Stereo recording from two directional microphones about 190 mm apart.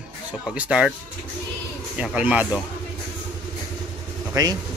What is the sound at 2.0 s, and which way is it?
Speech, 5° right (ahead or behind).